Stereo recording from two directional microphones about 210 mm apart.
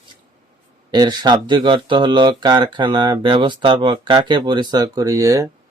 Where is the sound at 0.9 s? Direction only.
20° right (ahead or behind).